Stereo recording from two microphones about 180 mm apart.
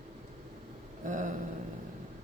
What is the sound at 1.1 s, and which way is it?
Speech, 45° right (ahead or behind).